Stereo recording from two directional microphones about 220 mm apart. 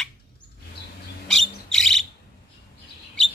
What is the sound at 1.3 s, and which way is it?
Bird, centre (ahead or behind).